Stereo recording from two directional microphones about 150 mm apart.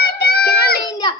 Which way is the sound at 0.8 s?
30° left (ahead or behind).